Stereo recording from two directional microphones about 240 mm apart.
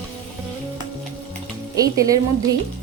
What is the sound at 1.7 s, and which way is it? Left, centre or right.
Speech, centre.